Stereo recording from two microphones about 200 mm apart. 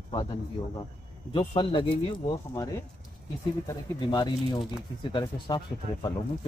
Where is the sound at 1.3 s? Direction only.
25° left (ahead or behind).